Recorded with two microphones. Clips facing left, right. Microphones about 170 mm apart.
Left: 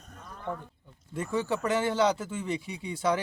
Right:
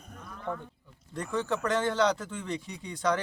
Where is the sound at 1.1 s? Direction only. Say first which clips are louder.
Left 1 dB; 5° left (ahead or behind).